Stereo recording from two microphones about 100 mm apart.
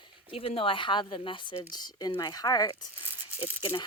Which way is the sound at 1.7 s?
45° left (ahead or behind).